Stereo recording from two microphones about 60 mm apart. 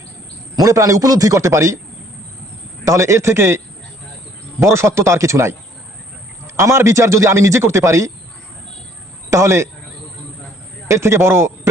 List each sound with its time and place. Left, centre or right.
0.5 s a man's voice: right
1.4 s speech: right
2.8 s speech: right
4.6 s speech: right
6.6 s speech: right
9.3 s speech: right
10.8 s a man's voice: right